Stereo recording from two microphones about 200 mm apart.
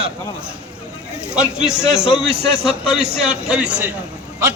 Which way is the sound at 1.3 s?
5° right (ahead or behind).